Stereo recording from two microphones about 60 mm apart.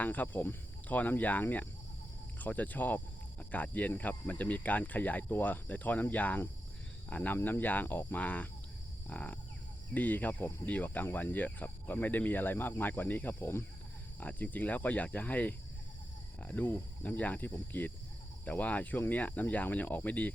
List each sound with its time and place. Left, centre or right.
0.0 s speech: left
14.2 s speech: left
16.6 s speech: left